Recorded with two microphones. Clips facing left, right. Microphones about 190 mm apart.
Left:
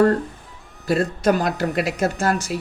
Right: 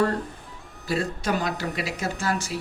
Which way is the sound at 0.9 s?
50° left (ahead or behind).